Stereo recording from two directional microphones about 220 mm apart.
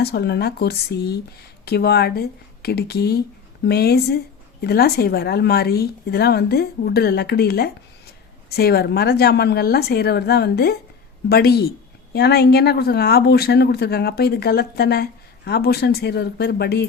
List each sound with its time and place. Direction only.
0.0 s speech: 45° left (ahead or behind)